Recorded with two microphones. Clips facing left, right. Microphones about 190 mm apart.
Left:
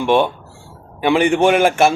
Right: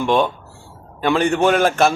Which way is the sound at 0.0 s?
10° left (ahead or behind).